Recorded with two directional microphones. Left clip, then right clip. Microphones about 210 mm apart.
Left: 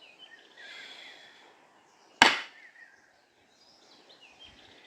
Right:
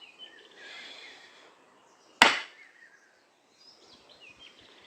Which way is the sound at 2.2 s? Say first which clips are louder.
Even; 20° right (ahead or behind).